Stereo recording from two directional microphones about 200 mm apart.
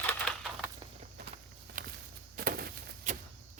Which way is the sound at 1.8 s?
40° right (ahead or behind).